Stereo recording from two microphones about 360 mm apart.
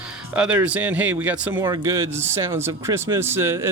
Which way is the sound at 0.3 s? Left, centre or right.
Centre.